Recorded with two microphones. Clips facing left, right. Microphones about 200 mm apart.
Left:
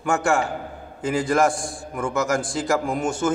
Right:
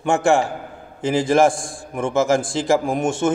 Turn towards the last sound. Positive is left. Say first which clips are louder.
# right 3 dB
turn(degrees=-25)  # may be behind; listen again after turning